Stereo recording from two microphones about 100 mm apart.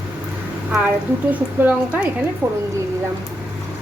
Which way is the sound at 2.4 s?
30° right (ahead or behind).